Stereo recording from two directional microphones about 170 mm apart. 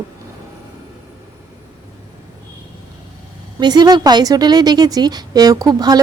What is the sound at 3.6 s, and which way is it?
A woman's voice, 25° right (ahead or behind).